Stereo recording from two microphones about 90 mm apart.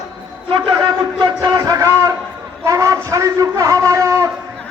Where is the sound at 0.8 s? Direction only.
50° right (ahead or behind).